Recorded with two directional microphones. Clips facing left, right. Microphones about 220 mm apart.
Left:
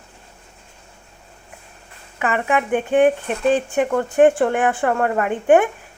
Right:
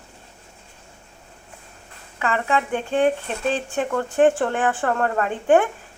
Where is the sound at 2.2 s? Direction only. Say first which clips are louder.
Left 2 dB; 15° left (ahead or behind).